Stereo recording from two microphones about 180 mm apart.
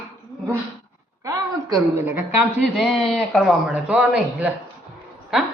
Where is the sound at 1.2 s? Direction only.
20° right (ahead or behind).